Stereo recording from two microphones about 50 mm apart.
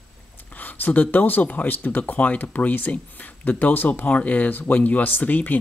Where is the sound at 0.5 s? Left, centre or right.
Left.